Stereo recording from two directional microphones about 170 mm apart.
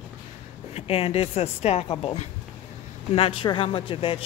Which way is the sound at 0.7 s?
35° left (ahead or behind).